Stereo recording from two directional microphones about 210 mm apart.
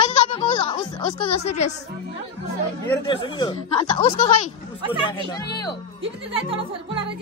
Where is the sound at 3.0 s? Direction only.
20° left (ahead or behind).